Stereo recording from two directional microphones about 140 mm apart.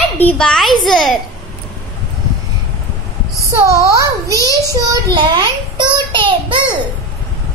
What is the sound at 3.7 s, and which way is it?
A child's voice, 20° right (ahead or behind).